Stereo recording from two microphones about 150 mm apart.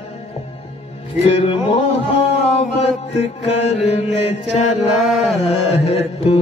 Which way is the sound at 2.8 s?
45° left (ahead or behind).